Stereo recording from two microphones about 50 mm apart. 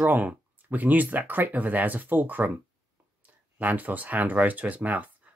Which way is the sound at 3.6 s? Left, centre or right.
Right.